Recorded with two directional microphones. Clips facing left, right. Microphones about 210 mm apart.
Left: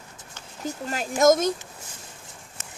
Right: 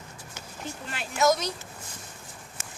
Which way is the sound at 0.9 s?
40° left (ahead or behind).